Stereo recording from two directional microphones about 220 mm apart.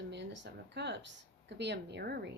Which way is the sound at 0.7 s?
50° right (ahead or behind).